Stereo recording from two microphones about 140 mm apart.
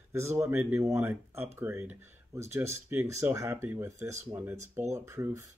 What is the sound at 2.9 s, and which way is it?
Speech, 20° right (ahead or behind).